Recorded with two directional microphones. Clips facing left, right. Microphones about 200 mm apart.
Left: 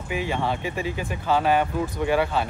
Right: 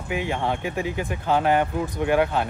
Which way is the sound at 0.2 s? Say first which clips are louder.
Even; 15° right (ahead or behind).